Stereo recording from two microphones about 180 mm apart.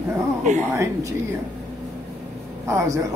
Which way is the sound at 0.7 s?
15° right (ahead or behind).